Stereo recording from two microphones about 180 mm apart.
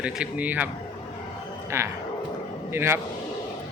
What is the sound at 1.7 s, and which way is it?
Speech, 15° right (ahead or behind).